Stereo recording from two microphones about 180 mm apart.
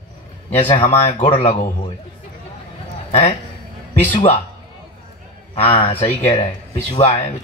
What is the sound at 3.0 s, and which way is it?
Speech, 40° left (ahead or behind).